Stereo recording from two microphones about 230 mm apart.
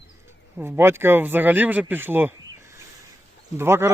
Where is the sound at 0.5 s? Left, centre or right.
Centre.